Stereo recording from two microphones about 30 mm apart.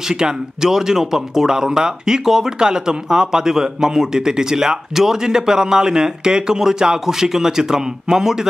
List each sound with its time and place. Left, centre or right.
0.1 s speech: right
0.7 s speech: centre